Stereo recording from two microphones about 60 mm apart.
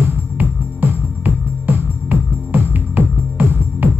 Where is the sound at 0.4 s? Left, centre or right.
Right.